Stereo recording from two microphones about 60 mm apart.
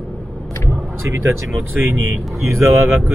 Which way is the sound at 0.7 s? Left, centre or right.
Right.